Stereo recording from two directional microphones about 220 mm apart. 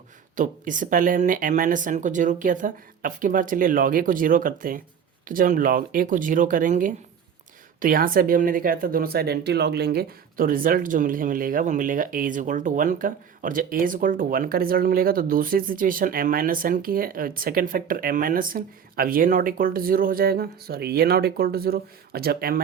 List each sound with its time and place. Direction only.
0.3 s speech: 35° right (ahead or behind)